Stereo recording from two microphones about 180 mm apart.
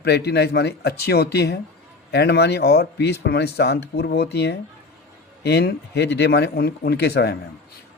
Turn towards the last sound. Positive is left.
turn(degrees=65)  # may be behind; listen again after turning